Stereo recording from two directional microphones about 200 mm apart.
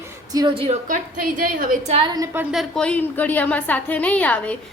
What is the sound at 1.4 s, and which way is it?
Speech, 45° right (ahead or behind).